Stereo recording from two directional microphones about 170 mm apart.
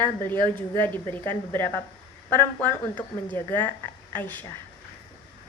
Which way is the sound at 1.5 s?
15° left (ahead or behind).